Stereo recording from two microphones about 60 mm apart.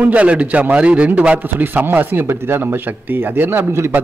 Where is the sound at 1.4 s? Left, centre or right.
Right.